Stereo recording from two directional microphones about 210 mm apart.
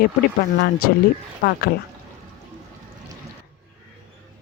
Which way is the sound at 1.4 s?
45° left (ahead or behind).